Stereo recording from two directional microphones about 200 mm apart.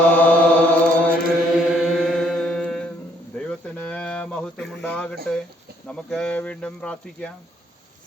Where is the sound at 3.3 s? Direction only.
5° left (ahead or behind).